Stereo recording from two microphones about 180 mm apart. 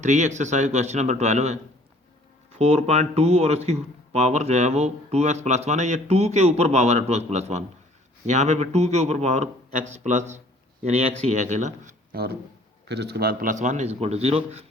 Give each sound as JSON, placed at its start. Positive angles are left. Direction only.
{"t": 0.0, "sound": "speech", "side_deg": -40}